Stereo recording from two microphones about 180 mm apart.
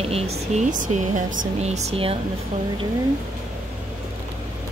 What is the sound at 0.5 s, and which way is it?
Speech, 45° right (ahead or behind).